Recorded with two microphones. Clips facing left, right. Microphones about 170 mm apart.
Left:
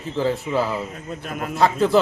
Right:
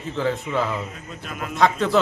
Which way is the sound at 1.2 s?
45° left (ahead or behind).